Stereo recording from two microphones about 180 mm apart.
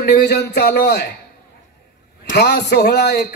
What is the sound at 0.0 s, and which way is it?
A man's voice, 65° left (ahead or behind).